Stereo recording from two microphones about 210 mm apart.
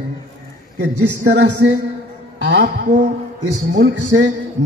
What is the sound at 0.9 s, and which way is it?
Speech, 55° right (ahead or behind).